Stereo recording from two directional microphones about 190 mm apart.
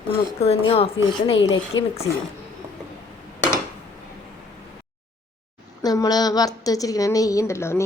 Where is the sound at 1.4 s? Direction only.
90° left.